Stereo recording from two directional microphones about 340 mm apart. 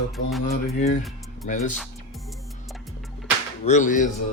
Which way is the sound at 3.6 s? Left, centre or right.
Left.